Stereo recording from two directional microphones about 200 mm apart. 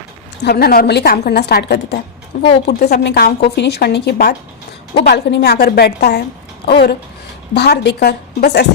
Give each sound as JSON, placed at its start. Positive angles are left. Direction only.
{"t": 0.4, "sound": "a woman's voice", "side_deg": 50}